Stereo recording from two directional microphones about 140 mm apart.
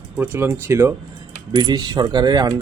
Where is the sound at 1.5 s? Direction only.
30° right (ahead or behind).